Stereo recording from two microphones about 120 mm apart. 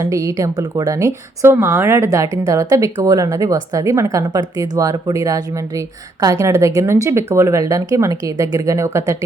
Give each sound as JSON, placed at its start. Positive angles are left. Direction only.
{"t": 0.0, "sound": "speech", "side_deg": -25}